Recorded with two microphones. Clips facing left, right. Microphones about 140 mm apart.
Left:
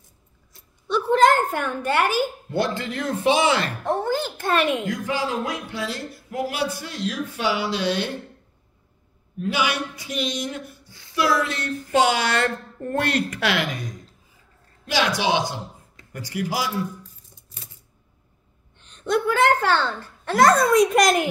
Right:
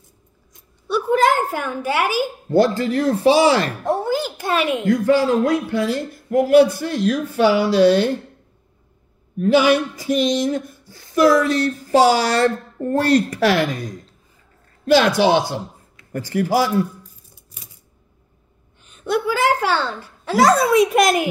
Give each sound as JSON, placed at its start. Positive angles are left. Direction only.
{"t": 0.5, "sound": "a sound", "side_deg": -15}
{"t": 2.8, "sound": "speech", "side_deg": -35}
{"t": 3.8, "sound": "speech", "side_deg": -10}
{"t": 4.8, "sound": "speech", "side_deg": -50}
{"t": 9.4, "sound": "speech", "side_deg": -45}
{"t": 15.0, "sound": "speech", "side_deg": -50}
{"t": 18.8, "sound": "a child's voice", "side_deg": -5}